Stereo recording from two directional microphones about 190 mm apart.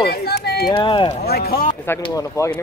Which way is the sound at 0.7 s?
25° left (ahead or behind).